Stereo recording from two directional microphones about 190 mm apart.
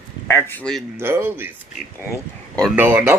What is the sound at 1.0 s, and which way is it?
Speech, 10° right (ahead or behind).